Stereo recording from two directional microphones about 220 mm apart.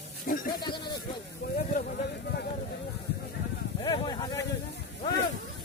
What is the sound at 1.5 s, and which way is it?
Speech, 35° left (ahead or behind).